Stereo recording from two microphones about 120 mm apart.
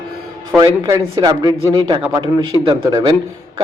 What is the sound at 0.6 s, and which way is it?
A man's voice, 35° right (ahead or behind).